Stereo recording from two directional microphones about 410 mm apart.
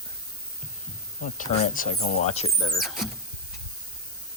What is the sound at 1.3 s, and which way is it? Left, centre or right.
Speech, centre.